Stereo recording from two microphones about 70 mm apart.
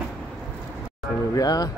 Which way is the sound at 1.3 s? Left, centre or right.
Left.